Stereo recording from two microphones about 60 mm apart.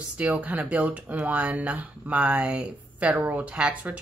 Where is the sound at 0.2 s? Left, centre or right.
Right.